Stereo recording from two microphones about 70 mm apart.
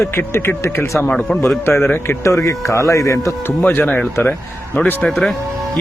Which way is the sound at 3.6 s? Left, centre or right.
Left.